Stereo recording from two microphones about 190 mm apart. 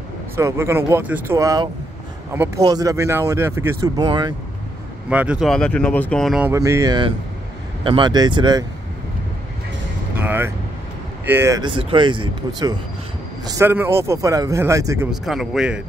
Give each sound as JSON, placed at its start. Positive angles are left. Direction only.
{"t": 0.4, "sound": "speech", "side_deg": -15}
{"t": 5.1, "sound": "speech", "side_deg": -5}
{"t": 6.5, "sound": "speech", "side_deg": -15}
{"t": 10.1, "sound": "speech", "side_deg": -10}
{"t": 11.6, "sound": "speech", "side_deg": -25}
{"t": 15.0, "sound": "speech", "side_deg": 0}